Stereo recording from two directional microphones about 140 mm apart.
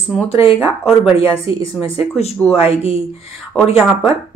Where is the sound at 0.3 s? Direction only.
40° left (ahead or behind).